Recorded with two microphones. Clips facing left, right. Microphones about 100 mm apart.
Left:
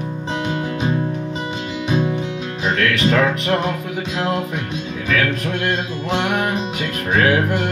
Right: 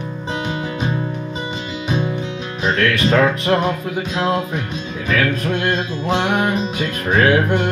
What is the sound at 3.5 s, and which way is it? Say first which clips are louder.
Music: right 2 dB; centre (ahead or behind).